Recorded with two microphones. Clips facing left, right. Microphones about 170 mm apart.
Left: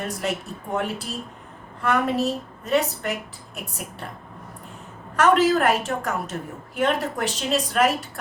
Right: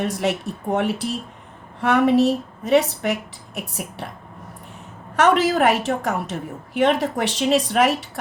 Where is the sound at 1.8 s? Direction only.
70° right (ahead or behind).